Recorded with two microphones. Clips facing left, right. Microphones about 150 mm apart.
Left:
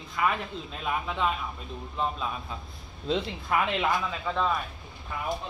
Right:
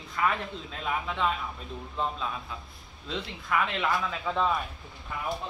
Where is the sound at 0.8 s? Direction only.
10° left (ahead or behind).